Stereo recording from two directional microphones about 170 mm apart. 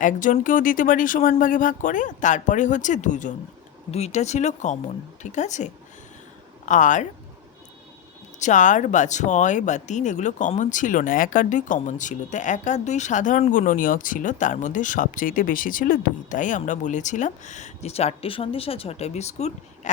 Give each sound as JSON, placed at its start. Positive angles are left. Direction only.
{"t": 0.0, "sound": "speech", "side_deg": 50}
{"t": 6.7, "sound": "speech", "side_deg": 50}
{"t": 8.4, "sound": "speech", "side_deg": 45}